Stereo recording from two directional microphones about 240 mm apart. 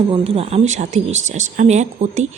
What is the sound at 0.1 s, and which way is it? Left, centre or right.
Speech, right.